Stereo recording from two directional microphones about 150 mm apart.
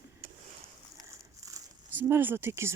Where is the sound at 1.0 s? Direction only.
20° right (ahead or behind).